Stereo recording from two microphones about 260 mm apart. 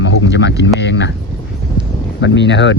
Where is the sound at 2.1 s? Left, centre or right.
Left.